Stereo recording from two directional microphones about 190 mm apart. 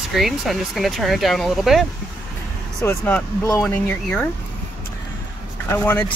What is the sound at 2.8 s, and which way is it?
Speech, 10° left (ahead or behind).